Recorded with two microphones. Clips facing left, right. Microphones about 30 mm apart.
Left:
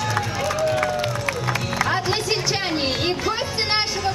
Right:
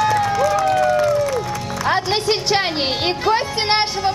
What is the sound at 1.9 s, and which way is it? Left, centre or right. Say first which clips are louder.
Music: right 8 dB; right.